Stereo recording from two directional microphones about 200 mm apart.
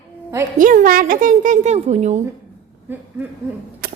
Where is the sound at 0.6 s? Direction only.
40° right (ahead or behind).